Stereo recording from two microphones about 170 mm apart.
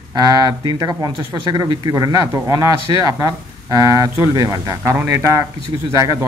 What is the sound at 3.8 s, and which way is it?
A man's voice, 20° right (ahead or behind).